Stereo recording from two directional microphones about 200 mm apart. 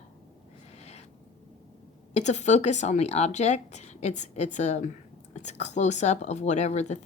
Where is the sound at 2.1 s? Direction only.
35° left (ahead or behind).